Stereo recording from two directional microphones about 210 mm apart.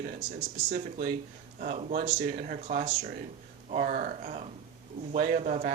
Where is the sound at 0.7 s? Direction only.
35° right (ahead or behind).